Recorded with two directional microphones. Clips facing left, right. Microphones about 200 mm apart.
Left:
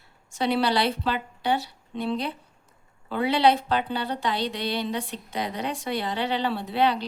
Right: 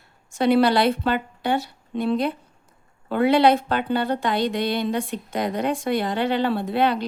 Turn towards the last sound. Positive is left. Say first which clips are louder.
# right 3 dB
turn(degrees=-50)  # may be behind; listen again after turning